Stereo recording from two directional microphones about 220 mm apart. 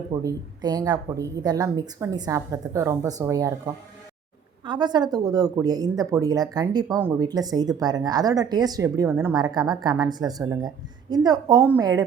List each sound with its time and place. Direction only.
0.1 s speech: 15° right (ahead or behind)
4.6 s speech: 20° right (ahead or behind)